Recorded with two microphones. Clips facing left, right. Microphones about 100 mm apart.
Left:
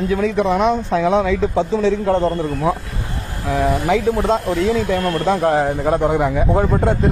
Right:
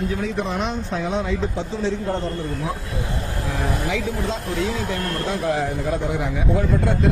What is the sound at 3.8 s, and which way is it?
Speech, 50° left (ahead or behind).